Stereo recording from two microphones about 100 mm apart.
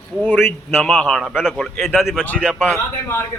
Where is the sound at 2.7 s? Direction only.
25° left (ahead or behind).